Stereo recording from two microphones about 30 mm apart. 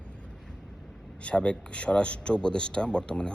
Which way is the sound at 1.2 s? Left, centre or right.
Left.